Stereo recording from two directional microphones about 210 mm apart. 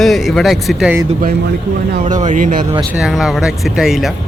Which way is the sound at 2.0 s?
35° right (ahead or behind).